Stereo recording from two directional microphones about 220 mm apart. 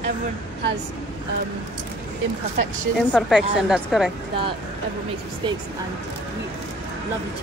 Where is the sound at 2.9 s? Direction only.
Centre (ahead or behind).